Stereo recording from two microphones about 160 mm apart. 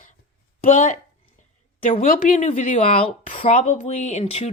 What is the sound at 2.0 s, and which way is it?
Speech, 65° left (ahead or behind).